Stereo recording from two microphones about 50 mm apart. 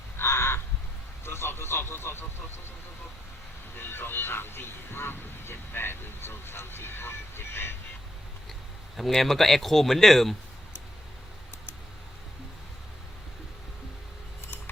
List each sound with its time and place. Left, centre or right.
0.2 s crow: left
1.2 s speech: left
3.8 s speech: left
9.0 s speech: centre